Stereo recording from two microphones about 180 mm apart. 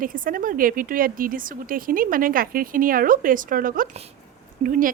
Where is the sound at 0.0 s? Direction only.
50° right (ahead or behind).